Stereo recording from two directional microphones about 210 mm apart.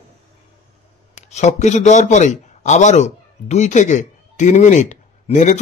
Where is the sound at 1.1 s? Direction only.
35° left (ahead or behind).